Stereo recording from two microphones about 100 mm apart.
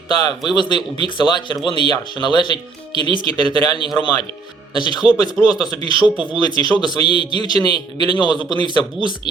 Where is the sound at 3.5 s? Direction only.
50° left (ahead or behind).